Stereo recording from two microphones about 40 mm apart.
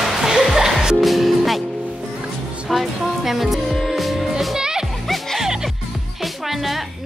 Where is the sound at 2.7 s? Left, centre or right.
Centre.